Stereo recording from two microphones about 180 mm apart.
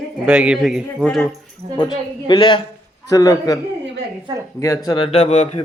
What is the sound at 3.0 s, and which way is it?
Speech, 20° left (ahead or behind).